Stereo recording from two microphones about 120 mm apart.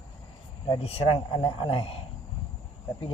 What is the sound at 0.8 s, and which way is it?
Speech, 55° left (ahead or behind).